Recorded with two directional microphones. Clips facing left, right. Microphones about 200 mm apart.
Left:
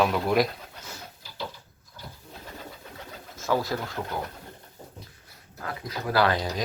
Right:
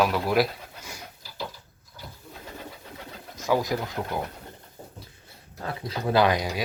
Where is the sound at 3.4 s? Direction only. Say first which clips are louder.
Right 2 dB; 15° right (ahead or behind).